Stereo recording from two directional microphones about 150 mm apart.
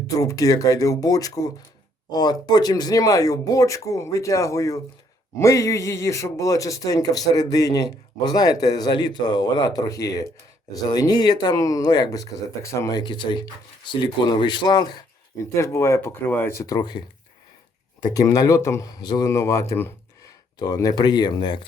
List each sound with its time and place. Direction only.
0.2 s speech: 20° left (ahead or behind)
18.0 s speech: 25° left (ahead or behind)